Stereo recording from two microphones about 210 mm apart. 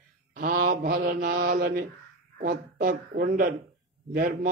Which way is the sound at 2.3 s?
40° right (ahead or behind).